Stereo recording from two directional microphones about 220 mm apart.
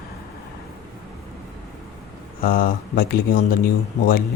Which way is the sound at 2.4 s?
40° left (ahead or behind).